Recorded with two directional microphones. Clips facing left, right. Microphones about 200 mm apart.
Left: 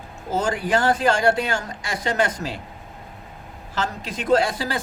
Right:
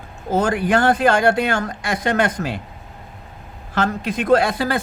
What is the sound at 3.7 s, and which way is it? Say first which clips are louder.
Speech: right 7 dB; 60° right (ahead or behind).